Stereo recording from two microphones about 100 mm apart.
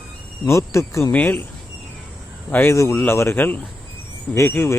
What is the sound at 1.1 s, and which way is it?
Speech, 20° left (ahead or behind).